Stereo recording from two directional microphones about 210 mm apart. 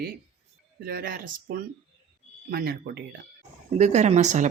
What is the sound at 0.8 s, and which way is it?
Speech, 45° right (ahead or behind).